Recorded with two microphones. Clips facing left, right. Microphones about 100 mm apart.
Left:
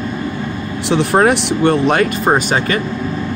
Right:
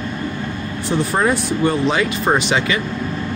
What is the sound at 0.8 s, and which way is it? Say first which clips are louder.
Speech: left 5 dB; 80° left.